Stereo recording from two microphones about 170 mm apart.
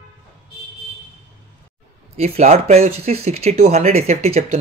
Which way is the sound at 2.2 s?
40° right (ahead or behind).